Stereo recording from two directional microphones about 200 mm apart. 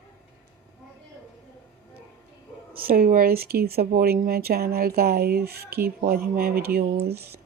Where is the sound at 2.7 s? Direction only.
45° right (ahead or behind).